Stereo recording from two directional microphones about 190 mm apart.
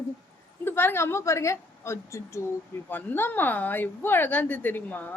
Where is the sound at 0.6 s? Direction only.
10° left (ahead or behind).